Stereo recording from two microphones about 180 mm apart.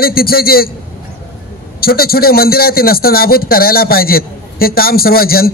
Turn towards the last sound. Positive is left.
turn(degrees=55)  # may be behind; listen again after turning